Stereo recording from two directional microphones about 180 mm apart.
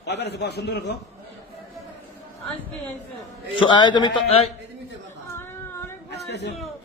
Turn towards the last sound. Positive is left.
turn(degrees=70)  # may be behind; listen again after turning